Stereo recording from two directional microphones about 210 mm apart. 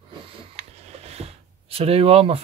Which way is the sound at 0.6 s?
30° right (ahead or behind).